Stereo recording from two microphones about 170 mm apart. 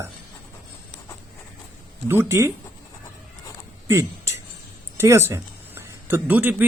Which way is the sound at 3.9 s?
15° right (ahead or behind).